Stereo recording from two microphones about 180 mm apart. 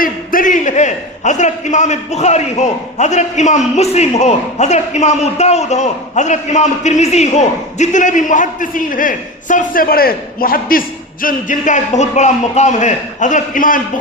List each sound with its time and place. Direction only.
0.0 s a man's voice: 50° left (ahead or behind)